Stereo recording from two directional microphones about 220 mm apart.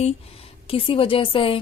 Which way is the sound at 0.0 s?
25° left (ahead or behind).